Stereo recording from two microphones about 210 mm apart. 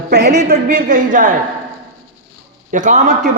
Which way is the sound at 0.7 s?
40° right (ahead or behind).